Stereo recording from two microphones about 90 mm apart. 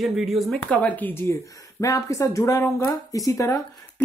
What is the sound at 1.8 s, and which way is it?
Speech, 35° left (ahead or behind).